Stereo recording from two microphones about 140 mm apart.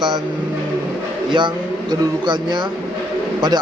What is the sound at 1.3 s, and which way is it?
A man's voice, 35° right (ahead or behind).